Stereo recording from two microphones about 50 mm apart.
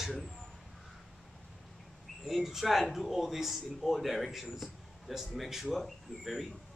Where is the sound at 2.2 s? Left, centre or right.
Centre.